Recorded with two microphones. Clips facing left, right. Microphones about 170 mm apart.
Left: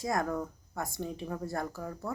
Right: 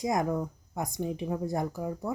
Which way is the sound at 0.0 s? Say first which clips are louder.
Right 3 dB; 20° right (ahead or behind).